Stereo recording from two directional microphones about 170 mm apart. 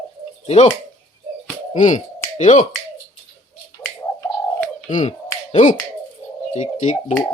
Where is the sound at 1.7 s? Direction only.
45° left (ahead or behind).